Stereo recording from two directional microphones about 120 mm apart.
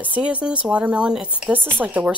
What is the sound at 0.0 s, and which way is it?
Speech, 10° right (ahead or behind).